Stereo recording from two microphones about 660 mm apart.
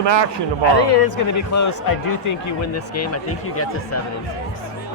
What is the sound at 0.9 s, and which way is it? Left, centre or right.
Speech, left.